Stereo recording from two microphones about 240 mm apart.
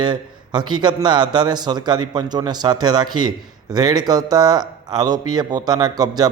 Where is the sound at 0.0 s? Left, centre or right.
Centre.